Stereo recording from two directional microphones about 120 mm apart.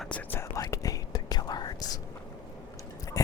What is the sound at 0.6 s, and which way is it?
Whispering, 30° left (ahead or behind).